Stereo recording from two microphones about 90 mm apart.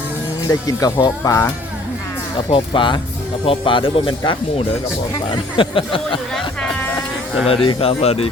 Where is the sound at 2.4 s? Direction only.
70° left (ahead or behind).